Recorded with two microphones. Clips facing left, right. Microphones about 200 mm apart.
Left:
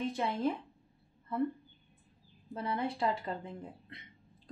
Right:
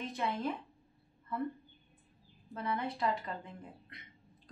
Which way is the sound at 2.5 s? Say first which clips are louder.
Left 2 dB; 30° left (ahead or behind).